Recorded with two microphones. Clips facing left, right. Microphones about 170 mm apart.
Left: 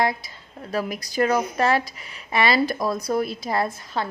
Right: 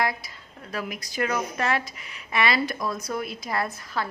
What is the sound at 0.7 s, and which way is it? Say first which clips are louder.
A woman's voice: left 6 dB; 35° left (ahead or behind).